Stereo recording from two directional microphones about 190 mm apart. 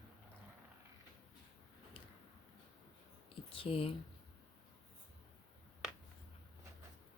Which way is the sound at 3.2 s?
30° left (ahead or behind).